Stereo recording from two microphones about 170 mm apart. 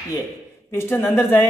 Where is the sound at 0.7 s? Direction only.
15° left (ahead or behind).